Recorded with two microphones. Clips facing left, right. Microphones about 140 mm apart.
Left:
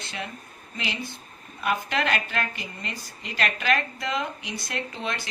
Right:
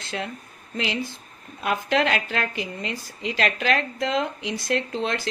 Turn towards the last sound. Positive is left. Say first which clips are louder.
# right 7 dB
turn(degrees=-90)